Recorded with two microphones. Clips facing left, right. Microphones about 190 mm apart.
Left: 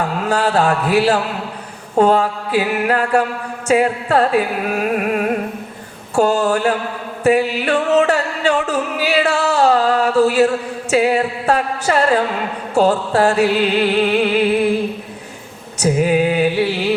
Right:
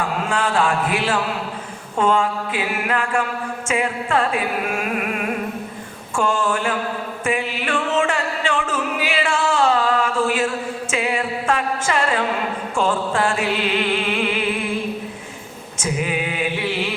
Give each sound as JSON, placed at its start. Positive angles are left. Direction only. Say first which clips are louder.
{"t": 0.3, "sound": "music", "louder": "left 5 dB", "side_deg": 40}
{"t": 15.8, "sound": "music", "louder": "left 9 dB", "side_deg": 40}